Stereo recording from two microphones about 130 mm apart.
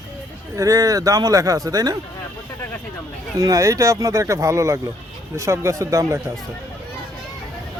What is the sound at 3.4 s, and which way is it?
A man's voice, 25° right (ahead or behind).